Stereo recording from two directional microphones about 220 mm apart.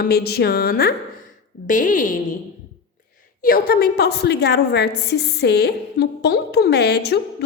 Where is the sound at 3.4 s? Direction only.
45° left (ahead or behind).